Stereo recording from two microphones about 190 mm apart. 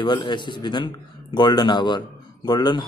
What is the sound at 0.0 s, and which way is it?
A man's voice, 25° left (ahead or behind).